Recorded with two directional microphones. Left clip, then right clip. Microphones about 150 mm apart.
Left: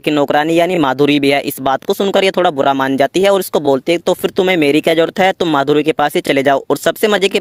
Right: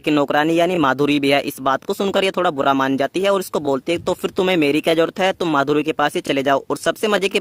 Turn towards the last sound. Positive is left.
turn(degrees=30)  # may be behind; listen again after turning